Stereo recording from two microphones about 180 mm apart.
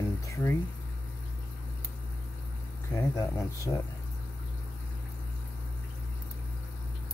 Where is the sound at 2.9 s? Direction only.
20° left (ahead or behind).